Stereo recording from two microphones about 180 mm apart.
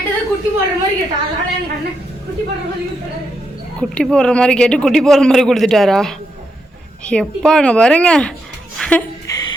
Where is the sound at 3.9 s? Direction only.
5° left (ahead or behind).